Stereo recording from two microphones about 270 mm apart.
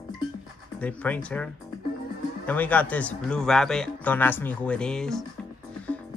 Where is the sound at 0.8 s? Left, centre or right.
Centre.